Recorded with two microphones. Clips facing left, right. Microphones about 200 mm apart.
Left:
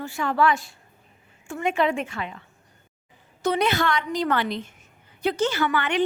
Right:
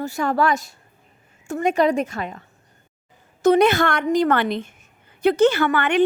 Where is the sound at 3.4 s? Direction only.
50° right (ahead or behind).